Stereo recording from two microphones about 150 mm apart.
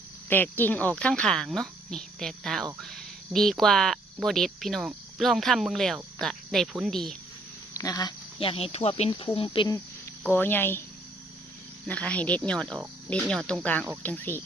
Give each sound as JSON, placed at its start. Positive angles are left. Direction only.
{"t": 0.3, "sound": "speech", "side_deg": 15}
{"t": 7.7, "sound": "speech", "side_deg": 20}
{"t": 8.4, "sound": "speech", "side_deg": 40}
{"t": 10.2, "sound": "speech", "side_deg": 10}
{"t": 11.9, "sound": "speech", "side_deg": 10}